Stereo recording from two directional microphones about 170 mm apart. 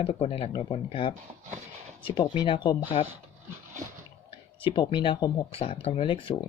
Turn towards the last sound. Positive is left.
turn(degrees=30)  # may be behind; listen again after turning